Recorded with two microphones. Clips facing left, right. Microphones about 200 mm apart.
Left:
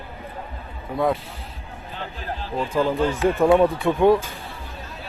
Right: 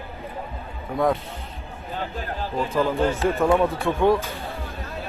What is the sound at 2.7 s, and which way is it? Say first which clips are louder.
A man's voice: left 1 dB; 15° left (ahead or behind).